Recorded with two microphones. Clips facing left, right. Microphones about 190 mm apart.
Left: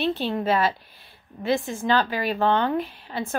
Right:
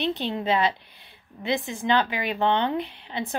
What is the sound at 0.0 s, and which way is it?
A woman's voice, 20° right (ahead or behind).